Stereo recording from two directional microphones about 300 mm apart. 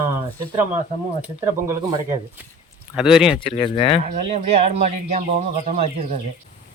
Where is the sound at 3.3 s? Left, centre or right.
Centre.